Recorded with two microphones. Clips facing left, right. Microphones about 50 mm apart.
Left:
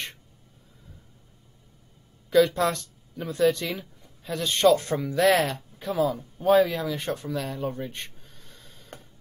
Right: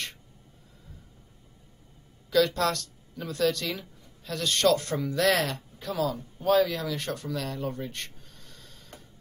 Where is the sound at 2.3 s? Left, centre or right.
Left.